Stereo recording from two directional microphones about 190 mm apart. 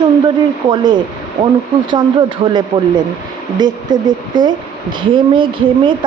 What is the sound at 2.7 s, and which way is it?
A woman's voice, 25° right (ahead or behind).